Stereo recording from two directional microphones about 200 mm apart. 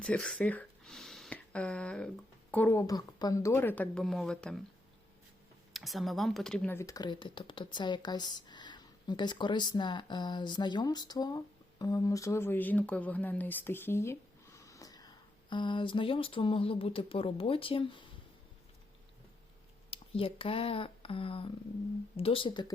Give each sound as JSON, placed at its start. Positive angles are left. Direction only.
{"t": 0.0, "sound": "a woman's voice", "side_deg": 5}
{"t": 5.7, "sound": "speech", "side_deg": 0}
{"t": 19.9, "sound": "speech", "side_deg": 25}